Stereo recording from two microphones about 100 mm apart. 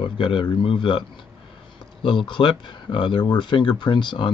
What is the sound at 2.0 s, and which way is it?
Speech, 50° left (ahead or behind).